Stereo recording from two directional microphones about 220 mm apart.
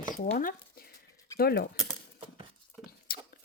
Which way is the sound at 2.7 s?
10° left (ahead or behind).